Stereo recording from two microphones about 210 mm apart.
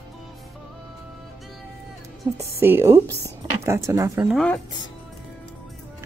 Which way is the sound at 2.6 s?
10° right (ahead or behind).